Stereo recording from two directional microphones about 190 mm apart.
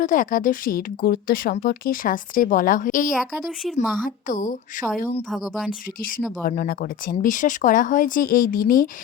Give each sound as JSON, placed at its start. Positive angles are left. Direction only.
{"t": 0.0, "sound": "a woman's voice", "side_deg": 45}
{"t": 3.6, "sound": "speech", "side_deg": 0}
{"t": 4.0, "sound": "a woman's voice", "side_deg": 40}
{"t": 5.3, "sound": "speech", "side_deg": 0}
{"t": 6.4, "sound": "a woman's voice", "side_deg": 50}